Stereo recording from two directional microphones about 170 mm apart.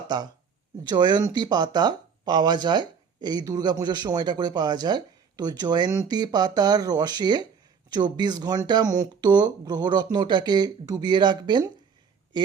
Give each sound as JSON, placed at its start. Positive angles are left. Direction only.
{"t": 0.1, "sound": "speech", "side_deg": -25}